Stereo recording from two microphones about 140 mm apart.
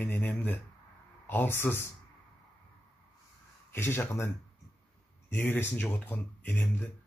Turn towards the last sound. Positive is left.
turn(degrees=10)  # may be behind; listen again after turning